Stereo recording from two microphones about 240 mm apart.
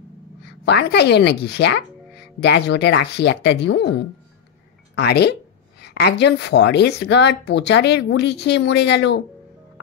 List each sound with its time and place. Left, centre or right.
0.7 s speech: left
4.9 s speech: left